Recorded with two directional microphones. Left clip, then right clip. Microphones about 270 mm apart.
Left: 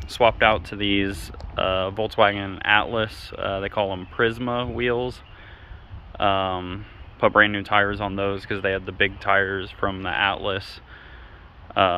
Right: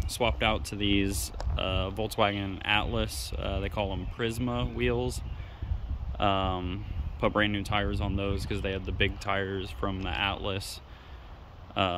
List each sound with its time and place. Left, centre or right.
0.2 s speech: centre
6.1 s speech: centre